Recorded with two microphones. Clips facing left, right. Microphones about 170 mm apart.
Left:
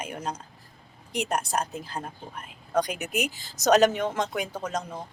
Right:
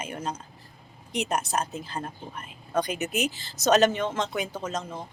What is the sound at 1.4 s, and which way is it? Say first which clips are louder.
Speech: even; 10° left (ahead or behind).